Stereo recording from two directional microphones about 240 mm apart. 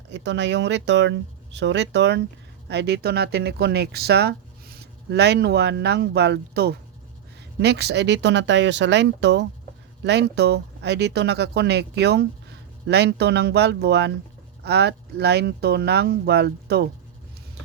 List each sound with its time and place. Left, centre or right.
0.1 s speech: right